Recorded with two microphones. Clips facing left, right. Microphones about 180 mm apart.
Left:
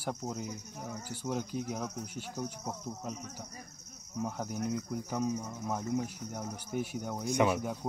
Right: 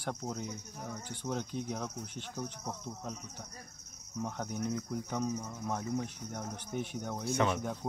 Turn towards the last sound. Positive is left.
turn(degrees=10)  # may be behind; listen again after turning